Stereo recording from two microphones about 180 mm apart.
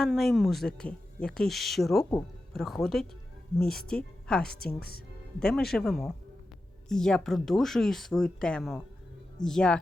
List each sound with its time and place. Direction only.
0.0 s speech: centre (ahead or behind)
4.8 s speech: 60° left (ahead or behind)
5.4 s speech: 5° left (ahead or behind)